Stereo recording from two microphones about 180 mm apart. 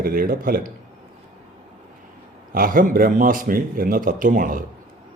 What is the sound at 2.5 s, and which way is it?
Speech, 50° right (ahead or behind).